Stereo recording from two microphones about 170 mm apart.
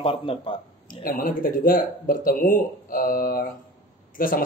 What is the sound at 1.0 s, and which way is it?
Speech, 60° left (ahead or behind).